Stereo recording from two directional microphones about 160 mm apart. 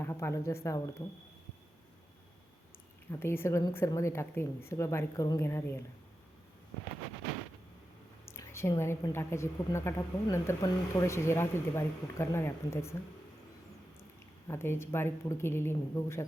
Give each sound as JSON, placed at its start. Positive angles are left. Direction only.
{"t": 0.0, "sound": "a woman's voice", "side_deg": 15}
{"t": 3.1, "sound": "a woman's voice", "side_deg": 15}
{"t": 8.2, "sound": "a woman's voice", "side_deg": 15}
{"t": 14.4, "sound": "a woman's voice", "side_deg": 15}